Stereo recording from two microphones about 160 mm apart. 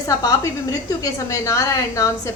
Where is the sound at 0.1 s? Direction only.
20° left (ahead or behind).